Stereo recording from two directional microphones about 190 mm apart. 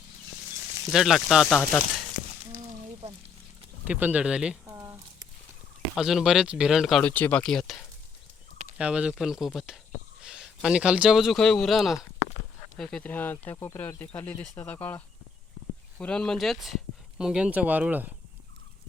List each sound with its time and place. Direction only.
0.9 s speech: centre (ahead or behind)
3.8 s speech: 5° right (ahead or behind)
4.6 s a sound: 15° right (ahead or behind)
6.0 s speech: centre (ahead or behind)